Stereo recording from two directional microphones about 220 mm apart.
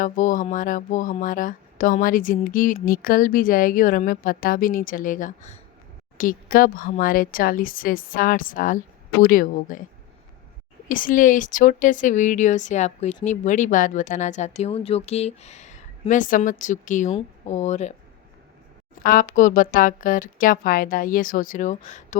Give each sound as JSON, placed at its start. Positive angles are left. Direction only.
{"t": 0.0, "sound": "speech", "side_deg": 35}
{"t": 10.8, "sound": "speech", "side_deg": 40}
{"t": 19.0, "sound": "speech", "side_deg": 35}